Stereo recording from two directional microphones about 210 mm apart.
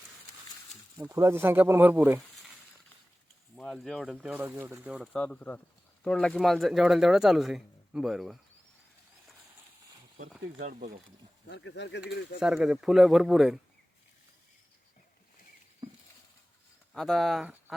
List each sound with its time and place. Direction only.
0.9 s speech: 15° right (ahead or behind)
3.5 s speech: 5° left (ahead or behind)
5.1 s speech: 5° left (ahead or behind)
10.2 s speech: 35° right (ahead or behind)
11.4 s speech: 55° left (ahead or behind)
12.4 s speech: 5° right (ahead or behind)
16.9 s speech: centre (ahead or behind)